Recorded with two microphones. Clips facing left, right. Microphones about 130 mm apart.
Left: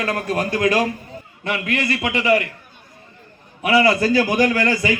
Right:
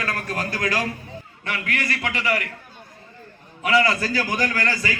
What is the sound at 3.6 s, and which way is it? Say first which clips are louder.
A man's voice: left 4 dB; 20° left (ahead or behind).